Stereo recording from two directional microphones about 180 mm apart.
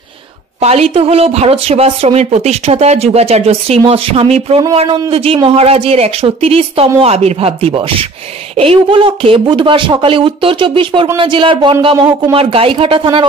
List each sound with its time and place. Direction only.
0.6 s speech: 35° right (ahead or behind)